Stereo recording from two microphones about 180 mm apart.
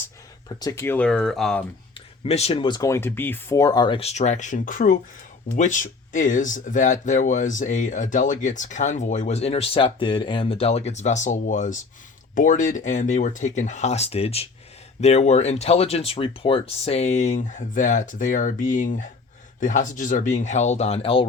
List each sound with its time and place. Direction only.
0.4 s speech: 20° left (ahead or behind); by 1.6 s centre (ahead or behind)
2.2 s speech: 35° left (ahead or behind)